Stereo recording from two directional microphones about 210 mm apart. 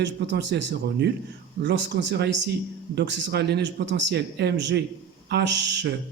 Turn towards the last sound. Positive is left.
turn(degrees=-55)  # may be behind; listen again after turning